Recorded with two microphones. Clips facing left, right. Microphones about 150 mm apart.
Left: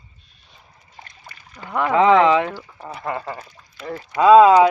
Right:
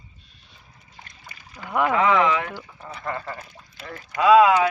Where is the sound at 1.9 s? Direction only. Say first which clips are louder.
Left 7 dB; 25° left (ahead or behind).